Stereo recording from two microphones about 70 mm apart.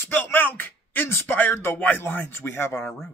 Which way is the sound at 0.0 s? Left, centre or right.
Left.